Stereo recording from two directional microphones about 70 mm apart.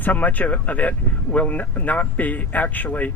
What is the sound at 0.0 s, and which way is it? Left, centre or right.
Speech, left.